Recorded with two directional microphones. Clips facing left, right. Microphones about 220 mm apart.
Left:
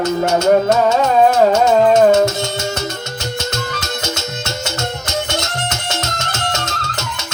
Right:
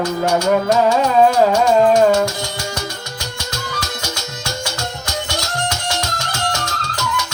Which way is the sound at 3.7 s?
25° left (ahead or behind).